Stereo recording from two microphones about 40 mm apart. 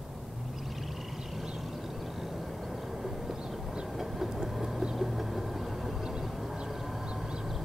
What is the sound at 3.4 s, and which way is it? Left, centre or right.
Train, centre.